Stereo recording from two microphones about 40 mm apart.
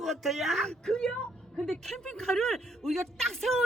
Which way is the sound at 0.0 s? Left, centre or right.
Centre.